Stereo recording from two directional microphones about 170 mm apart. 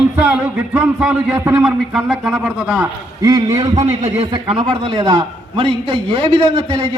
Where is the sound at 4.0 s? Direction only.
30° right (ahead or behind).